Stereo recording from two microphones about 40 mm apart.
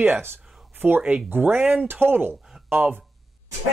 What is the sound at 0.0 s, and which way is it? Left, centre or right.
Speech, right.